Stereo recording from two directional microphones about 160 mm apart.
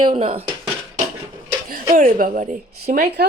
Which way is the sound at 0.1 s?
40° right (ahead or behind).